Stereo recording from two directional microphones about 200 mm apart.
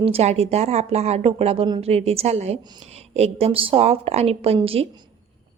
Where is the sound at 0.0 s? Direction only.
30° right (ahead or behind).